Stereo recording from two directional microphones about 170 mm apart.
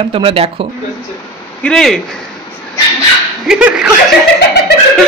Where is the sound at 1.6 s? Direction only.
5° left (ahead or behind).